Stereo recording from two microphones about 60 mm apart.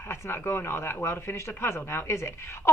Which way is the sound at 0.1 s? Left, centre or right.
Left.